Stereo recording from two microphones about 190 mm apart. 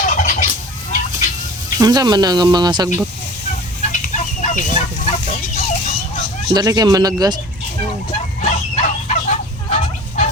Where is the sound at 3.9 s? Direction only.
40° left (ahead or behind).